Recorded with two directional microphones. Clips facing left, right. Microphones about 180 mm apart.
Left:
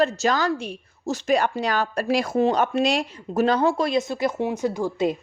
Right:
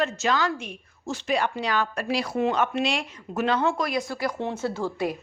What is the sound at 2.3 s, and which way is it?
A woman's voice, 35° left (ahead or behind).